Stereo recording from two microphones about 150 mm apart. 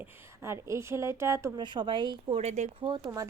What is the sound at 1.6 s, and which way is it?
Speech, 30° right (ahead or behind).